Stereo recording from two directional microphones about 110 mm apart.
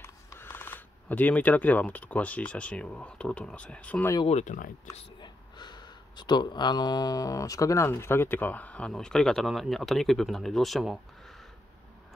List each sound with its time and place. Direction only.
0.0 s speech: 20° left (ahead or behind)
4.5 s speech: 90° left
5.2 s speech: 40° left (ahead or behind); by 11.0 s centre (ahead or behind)